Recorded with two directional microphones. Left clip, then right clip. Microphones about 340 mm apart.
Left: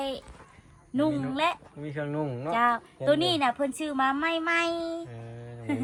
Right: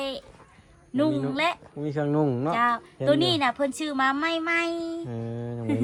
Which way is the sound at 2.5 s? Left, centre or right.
Centre.